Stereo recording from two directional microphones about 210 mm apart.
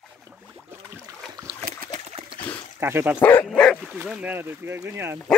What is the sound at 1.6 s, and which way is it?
Splash, 45° right (ahead or behind).